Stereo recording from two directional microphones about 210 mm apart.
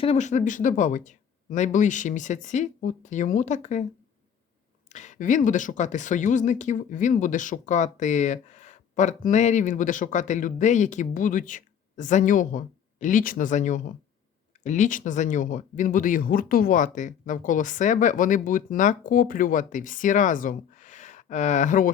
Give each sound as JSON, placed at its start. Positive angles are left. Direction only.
{"t": 0.0, "sound": "speech", "side_deg": 30}
{"t": 4.9, "sound": "speech", "side_deg": 35}